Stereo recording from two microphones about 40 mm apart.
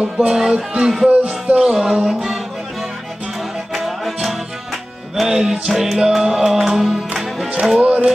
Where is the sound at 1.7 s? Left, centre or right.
Centre.